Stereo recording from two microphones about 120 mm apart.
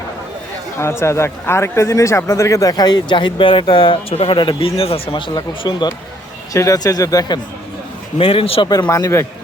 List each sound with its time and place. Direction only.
0.8 s speech: 20° left (ahead or behind)
8.2 s a man's voice: 50° left (ahead or behind)
8.6 s speech: 40° left (ahead or behind)
8.9 s a man's voice: 25° left (ahead or behind)